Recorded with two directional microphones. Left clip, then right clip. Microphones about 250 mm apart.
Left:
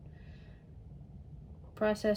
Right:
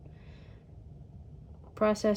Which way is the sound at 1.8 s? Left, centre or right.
Right.